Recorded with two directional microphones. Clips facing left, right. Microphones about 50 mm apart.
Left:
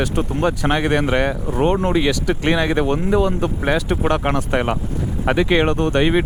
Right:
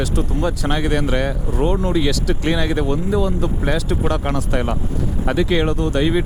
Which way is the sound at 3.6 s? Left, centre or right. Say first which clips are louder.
Left 2 dB; left.